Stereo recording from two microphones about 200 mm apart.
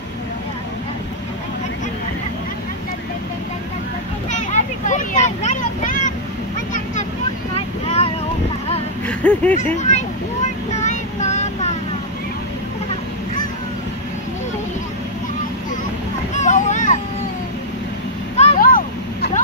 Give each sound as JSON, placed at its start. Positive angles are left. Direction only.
{"t": 4.3, "sound": "vehicle", "side_deg": 35}
{"t": 7.5, "sound": "vehicle", "side_deg": 30}
{"t": 9.0, "sound": "speech", "side_deg": 5}
{"t": 9.8, "sound": "a sound", "side_deg": 35}
{"t": 16.3, "sound": "a sound", "side_deg": 35}
{"t": 18.4, "sound": "vehicle", "side_deg": 40}